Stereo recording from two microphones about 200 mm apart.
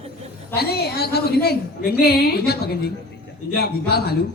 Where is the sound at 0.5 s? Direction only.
50° left (ahead or behind).